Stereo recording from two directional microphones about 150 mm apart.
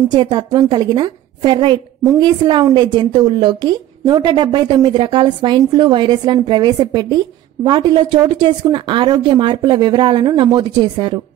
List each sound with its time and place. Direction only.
0.1 s a woman's voice: 30° right (ahead or behind)